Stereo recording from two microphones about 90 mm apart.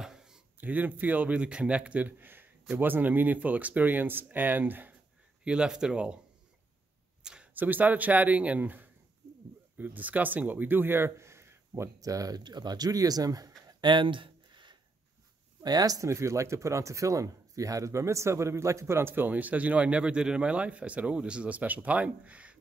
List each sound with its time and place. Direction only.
0.0 s a sound: 5° right (ahead or behind)
0.6 s speech: 20° right (ahead or behind)
5.4 s speech: 10° right (ahead or behind)
7.5 s speech: 20° right (ahead or behind); by 13.5 s 45° right (ahead or behind)
13.7 s a sound: 60° right (ahead or behind)
15.6 s speech: 45° right (ahead or behind); by 22.6 s 15° right (ahead or behind)